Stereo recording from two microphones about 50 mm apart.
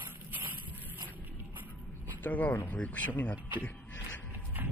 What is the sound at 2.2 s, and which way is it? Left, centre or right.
Speech, left.